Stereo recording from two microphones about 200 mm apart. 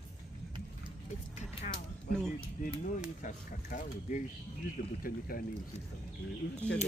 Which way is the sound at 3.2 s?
40° left (ahead or behind).